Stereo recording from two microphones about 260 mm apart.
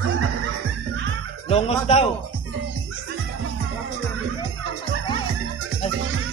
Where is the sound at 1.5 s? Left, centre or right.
Left.